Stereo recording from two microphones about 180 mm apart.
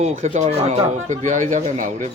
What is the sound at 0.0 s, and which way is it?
Speech, 40° right (ahead or behind).